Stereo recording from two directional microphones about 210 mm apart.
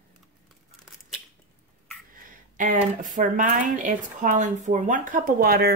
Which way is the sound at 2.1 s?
40° right (ahead or behind).